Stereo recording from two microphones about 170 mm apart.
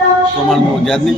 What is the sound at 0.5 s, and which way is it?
Speech, centre (ahead or behind).